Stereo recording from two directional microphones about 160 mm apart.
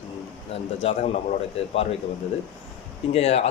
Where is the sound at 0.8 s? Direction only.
45° left (ahead or behind).